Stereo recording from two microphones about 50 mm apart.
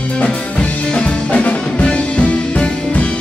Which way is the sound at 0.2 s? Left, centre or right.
Left.